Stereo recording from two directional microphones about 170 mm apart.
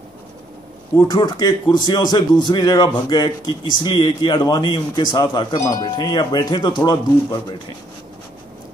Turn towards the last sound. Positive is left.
turn(degrees=20)  # may be behind; listen again after turning